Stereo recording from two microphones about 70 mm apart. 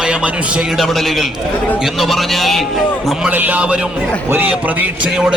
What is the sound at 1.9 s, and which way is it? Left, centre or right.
Speech, centre.